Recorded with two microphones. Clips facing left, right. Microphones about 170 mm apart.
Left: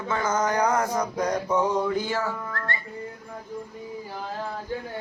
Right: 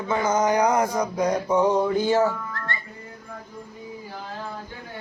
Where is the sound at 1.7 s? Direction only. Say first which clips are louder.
Right 5 dB; 25° right (ahead or behind).